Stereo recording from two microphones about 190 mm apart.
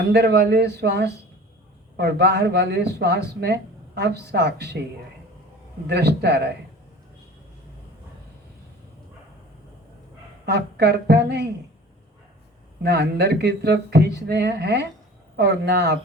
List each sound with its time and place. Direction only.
0.1 s speech: 60° right (ahead or behind)
5.9 s speech: 60° right (ahead or behind)
10.4 s speech: 60° right (ahead or behind)
12.8 s speech: 60° right (ahead or behind)